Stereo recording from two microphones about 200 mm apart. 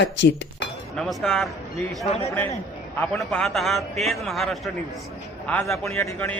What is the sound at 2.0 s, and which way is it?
Speech, 30° left (ahead or behind).